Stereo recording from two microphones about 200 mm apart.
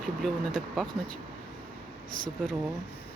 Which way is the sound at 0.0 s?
Centre (ahead or behind).